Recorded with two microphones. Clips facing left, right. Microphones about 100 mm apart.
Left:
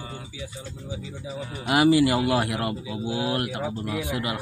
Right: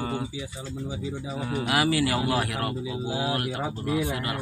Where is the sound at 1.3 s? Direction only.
70° right (ahead or behind).